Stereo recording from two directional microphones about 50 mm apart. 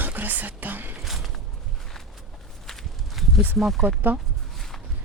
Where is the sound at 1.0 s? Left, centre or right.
Centre.